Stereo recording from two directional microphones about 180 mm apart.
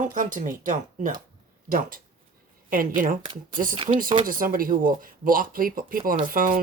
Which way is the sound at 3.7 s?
30° right (ahead or behind).